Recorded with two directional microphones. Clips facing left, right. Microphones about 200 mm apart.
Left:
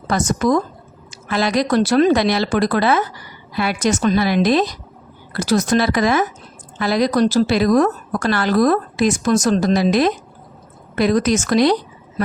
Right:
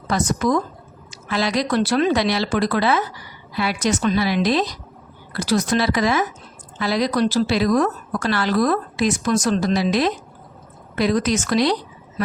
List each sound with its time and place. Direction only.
0.1 s a woman's voice: 45° left (ahead or behind)